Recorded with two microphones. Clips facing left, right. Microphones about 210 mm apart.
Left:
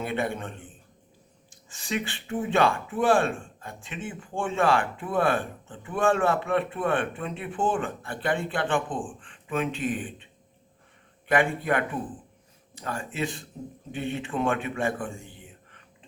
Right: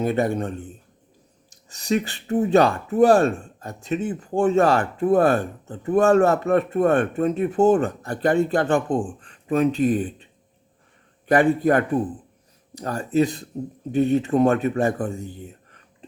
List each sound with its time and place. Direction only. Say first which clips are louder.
0.0 s speech: right 8 dB; 40° right (ahead or behind)
1.7 s speech: right 8 dB; 40° right (ahead or behind)
11.3 s a man's voice: right 7 dB; 40° right (ahead or behind)